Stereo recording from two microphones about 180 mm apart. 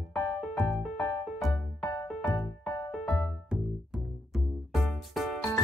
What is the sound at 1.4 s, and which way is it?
Music, centre (ahead or behind).